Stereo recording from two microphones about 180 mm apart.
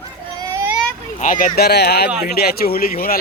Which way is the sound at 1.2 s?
50° left (ahead or behind).